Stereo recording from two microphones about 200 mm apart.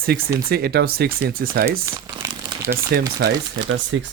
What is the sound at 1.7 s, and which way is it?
Crumpling, 15° right (ahead or behind).